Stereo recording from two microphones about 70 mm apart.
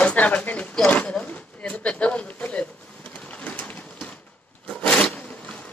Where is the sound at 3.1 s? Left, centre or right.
Centre.